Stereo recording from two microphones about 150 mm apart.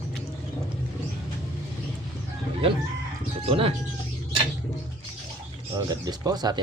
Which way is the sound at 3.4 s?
40° right (ahead or behind).